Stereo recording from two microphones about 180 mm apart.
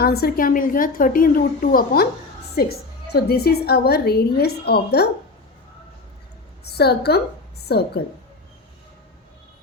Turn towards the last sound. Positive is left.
turn(degrees=65)  # may be behind; listen again after turning